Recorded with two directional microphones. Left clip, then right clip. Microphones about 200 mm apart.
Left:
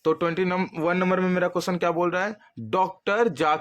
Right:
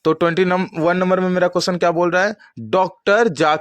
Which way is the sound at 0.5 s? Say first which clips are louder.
Right 7 dB; 25° right (ahead or behind).